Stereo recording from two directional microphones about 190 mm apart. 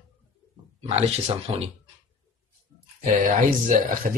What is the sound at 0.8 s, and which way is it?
Speech, 30° right (ahead or behind).